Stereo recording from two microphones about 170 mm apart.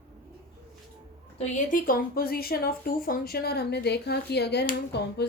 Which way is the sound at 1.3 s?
50° left (ahead or behind).